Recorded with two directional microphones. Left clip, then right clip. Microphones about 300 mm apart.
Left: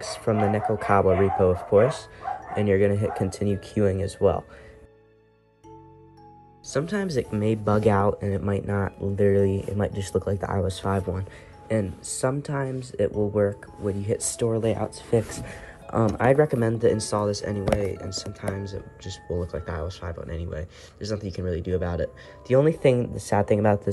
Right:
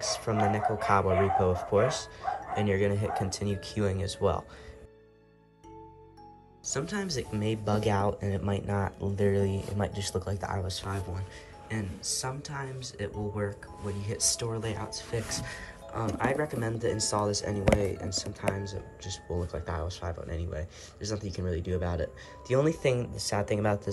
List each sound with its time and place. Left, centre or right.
0.2 s speech: centre
3.0 s speech: right
3.3 s speech: centre
6.6 s speech: centre
10.4 s speech: centre